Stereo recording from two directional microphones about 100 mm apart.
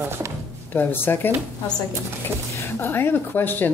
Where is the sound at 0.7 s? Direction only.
20° left (ahead or behind).